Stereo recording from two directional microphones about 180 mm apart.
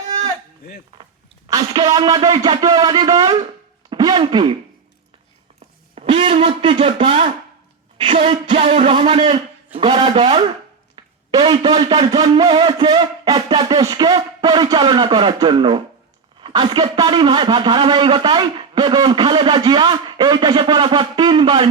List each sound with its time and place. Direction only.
1.5 s a man's voice: 20° right (ahead or behind)
5.5 s a sound: 35° right (ahead or behind)
7.9 s a man's voice: 30° right (ahead or behind)